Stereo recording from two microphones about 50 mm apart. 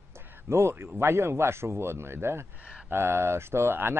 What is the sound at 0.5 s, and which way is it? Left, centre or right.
Speech, right.